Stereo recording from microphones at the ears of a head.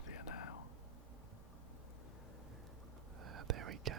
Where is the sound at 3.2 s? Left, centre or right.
Right.